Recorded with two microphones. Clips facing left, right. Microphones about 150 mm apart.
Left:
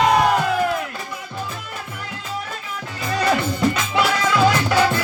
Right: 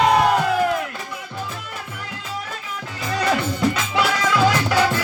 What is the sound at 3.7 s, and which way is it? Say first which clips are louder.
Music: left 1 dB; 45° left (ahead or behind).